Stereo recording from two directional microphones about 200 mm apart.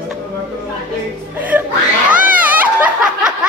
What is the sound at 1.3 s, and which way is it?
Music, 10° right (ahead or behind).